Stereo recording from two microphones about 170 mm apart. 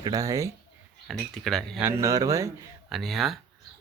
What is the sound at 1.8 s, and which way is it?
Speech, 15° right (ahead or behind).